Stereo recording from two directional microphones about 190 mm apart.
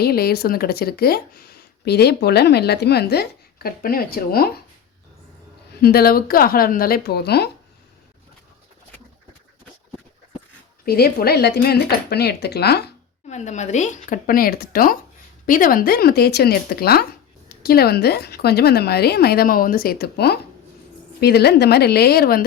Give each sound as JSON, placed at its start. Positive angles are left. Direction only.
{"t": 0.0, "sound": "speech", "side_deg": 55}
{"t": 5.8, "sound": "speech", "side_deg": 55}
{"t": 10.8, "sound": "speech", "side_deg": 55}
{"t": 13.2, "sound": "speech", "side_deg": 40}